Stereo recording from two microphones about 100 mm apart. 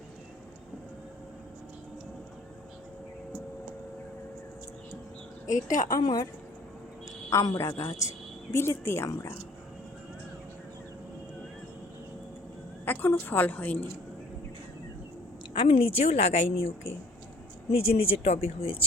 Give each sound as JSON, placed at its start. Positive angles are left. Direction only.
{"t": 5.6, "sound": "a woman's voice", "side_deg": 40}
{"t": 7.3, "sound": "a woman's voice", "side_deg": 30}
{"t": 12.8, "sound": "a woman's voice", "side_deg": 20}
{"t": 15.5, "sound": "a woman's voice", "side_deg": 65}
{"t": 17.7, "sound": "a woman's voice", "side_deg": 75}